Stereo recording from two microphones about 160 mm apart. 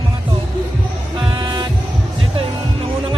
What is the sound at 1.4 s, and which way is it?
Music, 25° right (ahead or behind).